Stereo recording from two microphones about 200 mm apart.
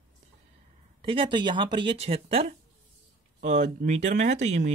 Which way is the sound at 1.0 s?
25° right (ahead or behind).